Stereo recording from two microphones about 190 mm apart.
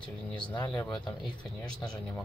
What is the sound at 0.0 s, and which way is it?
Speech, 5° left (ahead or behind).